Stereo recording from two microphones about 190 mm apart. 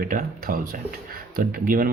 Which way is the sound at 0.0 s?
50° right (ahead or behind).